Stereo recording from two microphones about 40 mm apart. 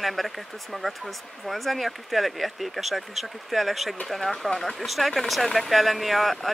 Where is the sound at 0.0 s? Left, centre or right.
Centre.